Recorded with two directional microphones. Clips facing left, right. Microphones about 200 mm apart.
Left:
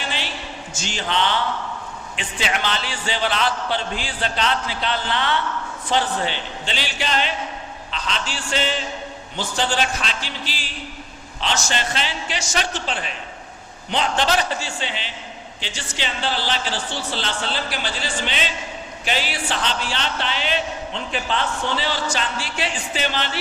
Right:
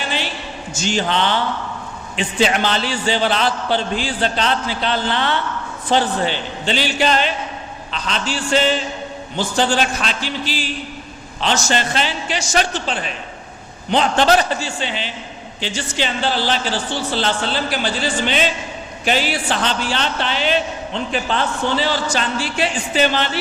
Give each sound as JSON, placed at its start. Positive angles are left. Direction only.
{"t": 0.7, "sound": "a man's voice", "side_deg": -40}
{"t": 11.3, "sound": "a man's voice", "side_deg": -45}